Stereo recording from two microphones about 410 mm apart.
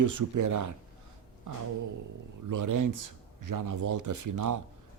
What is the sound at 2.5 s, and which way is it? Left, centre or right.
Speech, right.